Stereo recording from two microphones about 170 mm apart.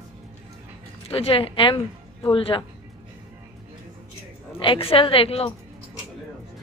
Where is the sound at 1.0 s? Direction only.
35° left (ahead or behind).